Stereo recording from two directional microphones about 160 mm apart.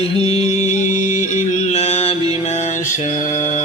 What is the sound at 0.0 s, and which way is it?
Music, 40° left (ahead or behind).